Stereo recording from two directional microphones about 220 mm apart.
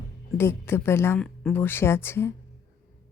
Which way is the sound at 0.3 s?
10° left (ahead or behind).